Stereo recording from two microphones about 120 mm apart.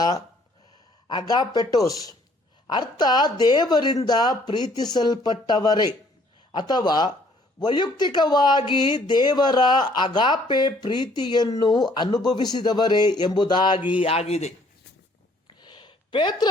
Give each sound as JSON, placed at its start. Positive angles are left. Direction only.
{"t": 1.0, "sound": "speech", "side_deg": 35}
{"t": 14.0, "sound": "a man's voice", "side_deg": 60}
{"t": 15.4, "sound": "a sound", "side_deg": 40}